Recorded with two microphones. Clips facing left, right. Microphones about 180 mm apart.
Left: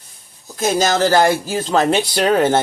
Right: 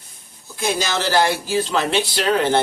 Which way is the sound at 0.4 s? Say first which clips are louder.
Left 6 dB; 40° left (ahead or behind).